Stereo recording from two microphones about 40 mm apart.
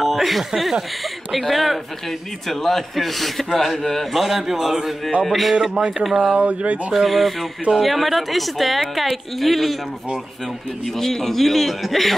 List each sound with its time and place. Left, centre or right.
0.0 s speech: centre
5.6 s speech: right
6.3 s speech: right
6.9 s speech: centre
11.0 s speech: centre